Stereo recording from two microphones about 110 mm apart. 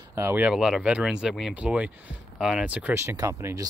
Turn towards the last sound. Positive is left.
turn(degrees=-30)  # may be behind; listen again after turning